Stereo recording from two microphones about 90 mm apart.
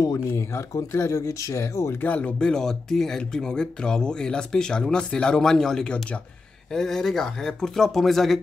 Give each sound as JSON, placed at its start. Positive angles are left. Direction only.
{"t": 0.0, "sound": "speech", "side_deg": 35}
{"t": 2.0, "sound": "speech", "side_deg": 15}